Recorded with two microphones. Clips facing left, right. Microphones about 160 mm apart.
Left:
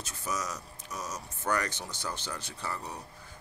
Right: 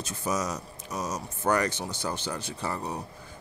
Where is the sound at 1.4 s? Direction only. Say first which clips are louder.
Right 6 dB; 20° right (ahead or behind).